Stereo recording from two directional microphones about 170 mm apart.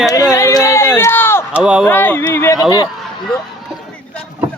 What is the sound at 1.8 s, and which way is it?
Speech, 10° left (ahead or behind).